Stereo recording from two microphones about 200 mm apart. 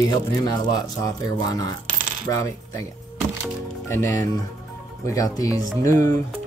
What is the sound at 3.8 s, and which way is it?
Speech, 15° left (ahead or behind).